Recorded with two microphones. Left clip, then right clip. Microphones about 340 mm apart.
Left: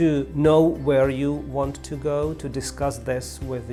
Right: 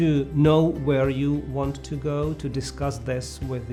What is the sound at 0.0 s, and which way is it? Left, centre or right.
Speech, left.